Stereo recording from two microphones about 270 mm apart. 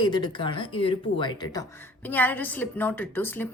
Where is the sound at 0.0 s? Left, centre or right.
Centre.